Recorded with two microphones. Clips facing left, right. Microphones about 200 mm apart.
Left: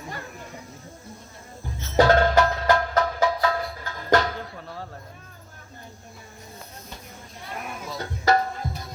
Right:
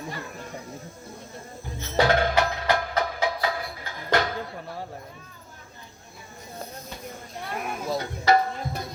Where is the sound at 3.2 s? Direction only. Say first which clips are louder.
Left 4 dB; 45° left (ahead or behind).